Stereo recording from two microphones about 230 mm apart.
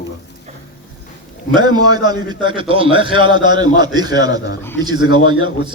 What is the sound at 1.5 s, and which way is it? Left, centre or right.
A man's voice, centre.